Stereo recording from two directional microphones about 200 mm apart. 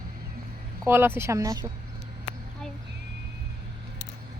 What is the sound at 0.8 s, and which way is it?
Speech, 10° right (ahead or behind).